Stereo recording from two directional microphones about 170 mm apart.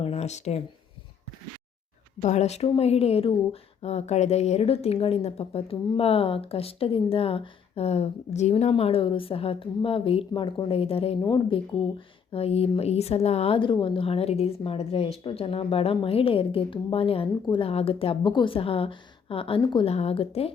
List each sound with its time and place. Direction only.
0.0 s speech: 40° left (ahead or behind)
2.2 s speech: 40° left (ahead or behind)